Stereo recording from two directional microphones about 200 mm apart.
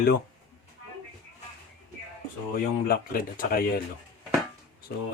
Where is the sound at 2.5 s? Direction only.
45° left (ahead or behind).